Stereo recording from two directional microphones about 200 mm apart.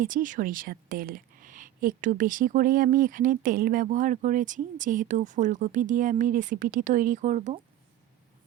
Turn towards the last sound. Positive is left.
turn(degrees=-35)  # may be behind; listen again after turning